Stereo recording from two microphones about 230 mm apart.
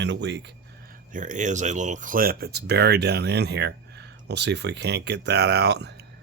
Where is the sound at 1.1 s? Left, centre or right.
Right.